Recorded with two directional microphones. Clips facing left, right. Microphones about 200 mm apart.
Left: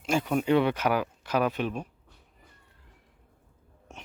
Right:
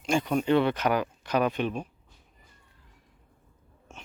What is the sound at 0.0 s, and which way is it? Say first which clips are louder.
Speech: right 1 dB; 5° left (ahead or behind).